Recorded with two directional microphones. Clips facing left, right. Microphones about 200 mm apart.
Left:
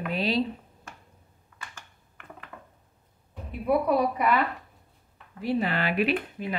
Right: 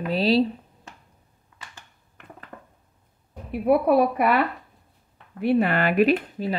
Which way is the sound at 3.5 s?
60° right (ahead or behind).